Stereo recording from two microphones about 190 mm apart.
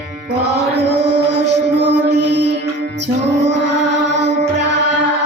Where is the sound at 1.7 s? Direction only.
65° right (ahead or behind).